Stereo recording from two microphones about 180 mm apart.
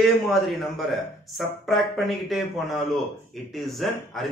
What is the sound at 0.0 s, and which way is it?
A man's voice, centre (ahead or behind).